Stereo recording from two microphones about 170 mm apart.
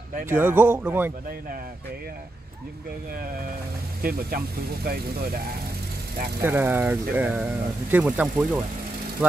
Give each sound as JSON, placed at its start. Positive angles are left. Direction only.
{"t": 0.3, "sound": "speech", "side_deg": -10}
{"t": 4.0, "sound": "speech", "side_deg": -60}
{"t": 6.4, "sound": "speech", "side_deg": -10}